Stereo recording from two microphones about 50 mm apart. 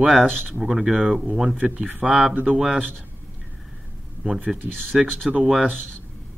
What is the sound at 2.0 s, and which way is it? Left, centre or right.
Speech, centre.